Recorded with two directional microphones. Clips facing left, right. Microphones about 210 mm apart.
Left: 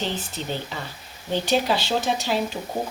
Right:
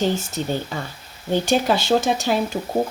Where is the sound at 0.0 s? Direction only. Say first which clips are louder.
Right 7 dB; 45° right (ahead or behind).